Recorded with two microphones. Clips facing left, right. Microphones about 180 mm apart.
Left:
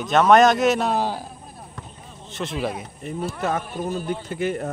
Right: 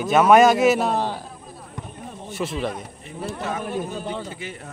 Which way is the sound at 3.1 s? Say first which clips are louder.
Left 4 dB; 45° left (ahead or behind).